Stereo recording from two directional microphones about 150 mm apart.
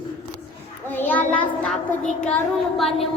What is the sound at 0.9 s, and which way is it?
A child's voice, 10° left (ahead or behind).